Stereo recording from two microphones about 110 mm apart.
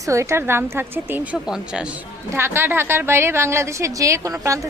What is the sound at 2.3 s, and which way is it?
A woman's voice, 20° right (ahead or behind).